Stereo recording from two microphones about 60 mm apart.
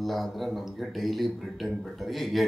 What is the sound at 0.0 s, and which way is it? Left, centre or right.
A woman's voice, centre.